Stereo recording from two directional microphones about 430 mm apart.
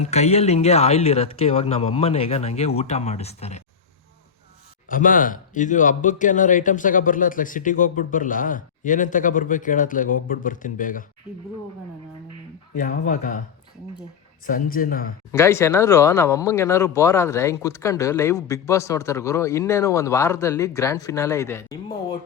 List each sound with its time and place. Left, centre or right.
0.0 s speech: centre
4.9 s speech: centre
12.8 s speech: centre
14.4 s speech: centre
15.3 s speech: centre